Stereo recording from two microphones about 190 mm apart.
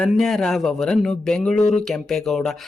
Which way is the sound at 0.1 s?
Centre (ahead or behind).